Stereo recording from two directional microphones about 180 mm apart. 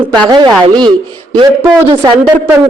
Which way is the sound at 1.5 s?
10° right (ahead or behind).